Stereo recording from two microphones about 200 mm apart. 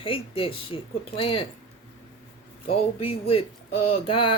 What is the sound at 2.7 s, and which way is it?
Speech, 30° left (ahead or behind).